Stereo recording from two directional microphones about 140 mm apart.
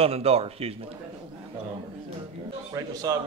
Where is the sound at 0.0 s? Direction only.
45° right (ahead or behind).